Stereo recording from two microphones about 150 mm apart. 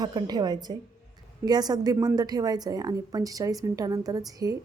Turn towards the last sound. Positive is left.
turn(degrees=-25)  # may be behind; listen again after turning